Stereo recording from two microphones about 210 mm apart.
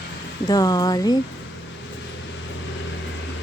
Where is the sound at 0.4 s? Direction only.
20° left (ahead or behind).